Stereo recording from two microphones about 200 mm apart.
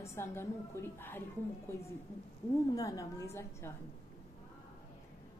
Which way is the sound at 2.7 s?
15° left (ahead or behind).